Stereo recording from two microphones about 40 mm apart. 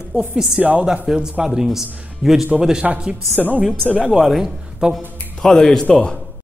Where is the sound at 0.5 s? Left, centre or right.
Right.